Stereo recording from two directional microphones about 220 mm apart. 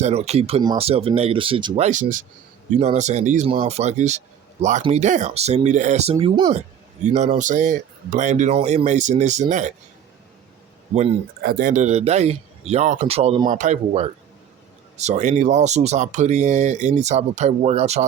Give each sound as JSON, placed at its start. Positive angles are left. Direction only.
{"t": 0.0, "sound": "speech", "side_deg": -30}
{"t": 11.4, "sound": "speech", "side_deg": -40}